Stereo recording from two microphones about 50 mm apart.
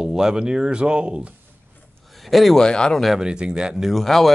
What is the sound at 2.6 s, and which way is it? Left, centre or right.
Speech, centre.